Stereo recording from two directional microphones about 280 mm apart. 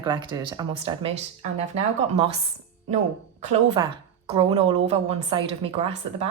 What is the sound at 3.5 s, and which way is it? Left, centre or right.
Speech, right.